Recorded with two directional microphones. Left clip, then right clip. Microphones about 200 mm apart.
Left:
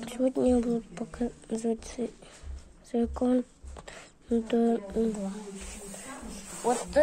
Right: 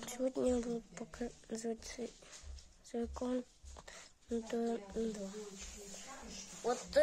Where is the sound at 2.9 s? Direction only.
5° left (ahead or behind).